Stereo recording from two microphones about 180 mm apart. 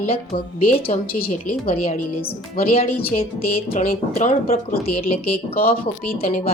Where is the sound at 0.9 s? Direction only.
40° left (ahead or behind).